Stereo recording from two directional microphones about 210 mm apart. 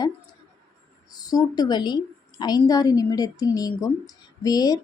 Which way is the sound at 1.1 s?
20° left (ahead or behind).